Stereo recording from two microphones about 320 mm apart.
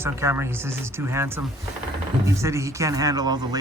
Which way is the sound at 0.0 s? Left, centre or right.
Centre.